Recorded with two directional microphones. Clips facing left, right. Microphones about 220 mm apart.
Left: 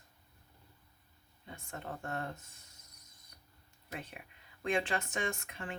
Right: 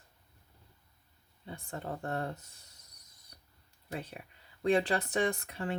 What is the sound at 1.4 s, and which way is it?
Speech, 35° right (ahead or behind).